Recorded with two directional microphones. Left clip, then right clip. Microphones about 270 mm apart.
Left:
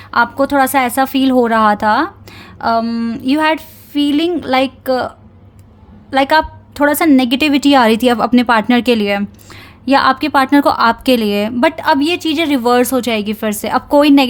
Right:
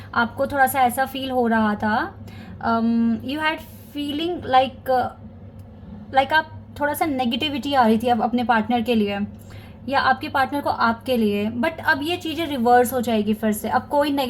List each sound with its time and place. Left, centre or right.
0.1 s a woman's voice: left
6.1 s a woman's voice: left
7.7 s a woman's voice: left
8.3 s a woman's voice: left
12.8 s a woman's voice: left